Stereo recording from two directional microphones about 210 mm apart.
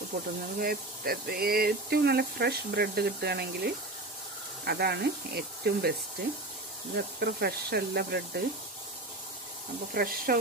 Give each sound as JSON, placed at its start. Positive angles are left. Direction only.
{"t": 0.6, "sound": "speech", "side_deg": -45}
{"t": 7.0, "sound": "speech", "side_deg": -50}
{"t": 9.9, "sound": "speech", "side_deg": -45}